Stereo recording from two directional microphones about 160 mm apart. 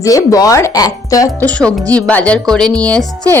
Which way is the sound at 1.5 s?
10° left (ahead or behind).